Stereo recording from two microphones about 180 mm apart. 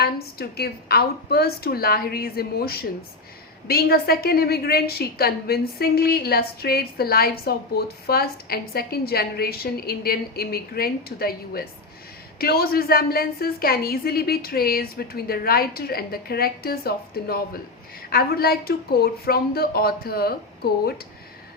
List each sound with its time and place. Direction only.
0.0 s a woman's voice: 60° left (ahead or behind)